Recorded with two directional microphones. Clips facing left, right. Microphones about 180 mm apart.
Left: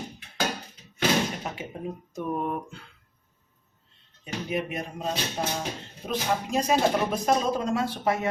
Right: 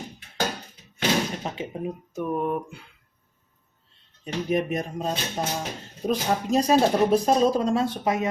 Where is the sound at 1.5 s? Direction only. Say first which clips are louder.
Right 2 dB; 30° right (ahead or behind).